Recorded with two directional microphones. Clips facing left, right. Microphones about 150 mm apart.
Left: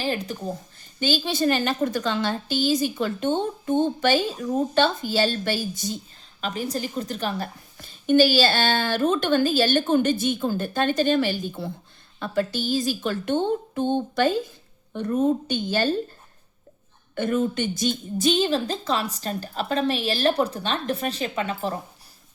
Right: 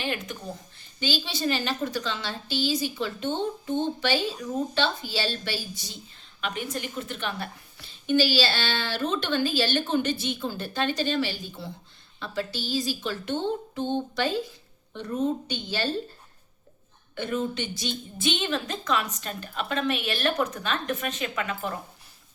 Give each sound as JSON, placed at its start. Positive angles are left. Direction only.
{"t": 0.0, "sound": "a woman's voice", "side_deg": 35}
{"t": 0.8, "sound": "a woman's voice", "side_deg": 45}
{"t": 6.4, "sound": "a woman's voice", "side_deg": 35}
{"t": 17.2, "sound": "a woman's voice", "side_deg": 50}